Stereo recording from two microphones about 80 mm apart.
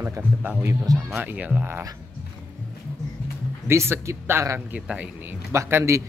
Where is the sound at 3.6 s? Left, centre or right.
Right.